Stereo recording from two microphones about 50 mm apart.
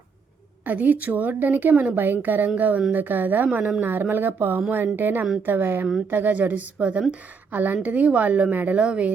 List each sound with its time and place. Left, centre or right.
0.6 s a woman's voice: right